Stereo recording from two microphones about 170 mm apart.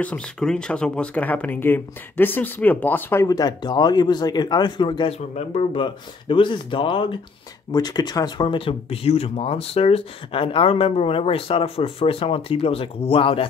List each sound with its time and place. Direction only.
0.0 s speech: 5° left (ahead or behind); by 5.1 s 25° left (ahead or behind)
5.3 s speech: 40° left (ahead or behind)